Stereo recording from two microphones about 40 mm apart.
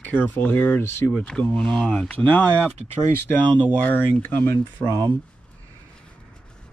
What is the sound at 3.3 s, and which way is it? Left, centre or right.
Speech, left.